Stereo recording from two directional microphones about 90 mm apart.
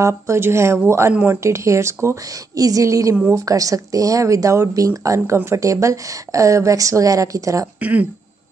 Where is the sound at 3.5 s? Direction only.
40° right (ahead or behind).